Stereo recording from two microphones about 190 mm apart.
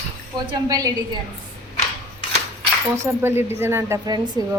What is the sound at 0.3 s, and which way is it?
Speech, 20° right (ahead or behind).